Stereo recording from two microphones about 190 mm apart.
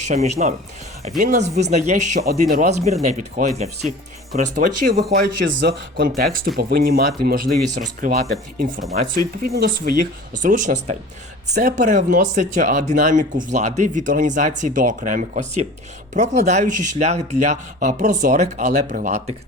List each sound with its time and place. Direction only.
0.0 s speech: 35° right (ahead or behind); by 5.7 s 65° right (ahead or behind)
6.0 s speech: 50° right (ahead or behind)